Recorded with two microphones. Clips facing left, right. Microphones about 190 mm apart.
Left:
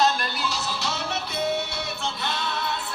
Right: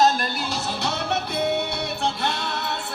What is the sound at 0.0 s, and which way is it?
Music, 50° right (ahead or behind).